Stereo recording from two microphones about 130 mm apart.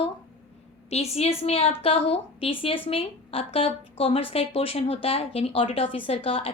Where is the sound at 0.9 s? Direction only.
55° left (ahead or behind).